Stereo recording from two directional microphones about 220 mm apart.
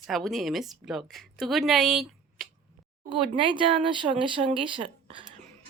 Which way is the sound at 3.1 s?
20° right (ahead or behind).